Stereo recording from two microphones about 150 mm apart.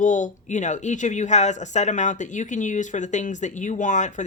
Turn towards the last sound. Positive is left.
turn(degrees=55)  # may be behind; listen again after turning